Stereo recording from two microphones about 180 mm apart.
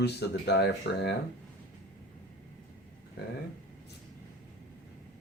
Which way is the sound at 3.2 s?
65° left (ahead or behind).